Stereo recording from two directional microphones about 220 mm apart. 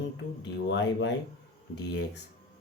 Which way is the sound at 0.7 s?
55° left (ahead or behind).